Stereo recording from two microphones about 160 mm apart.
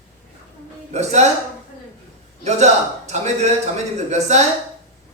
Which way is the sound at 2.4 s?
45° right (ahead or behind).